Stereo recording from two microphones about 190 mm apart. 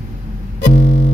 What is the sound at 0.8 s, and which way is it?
Music, 60° left (ahead or behind).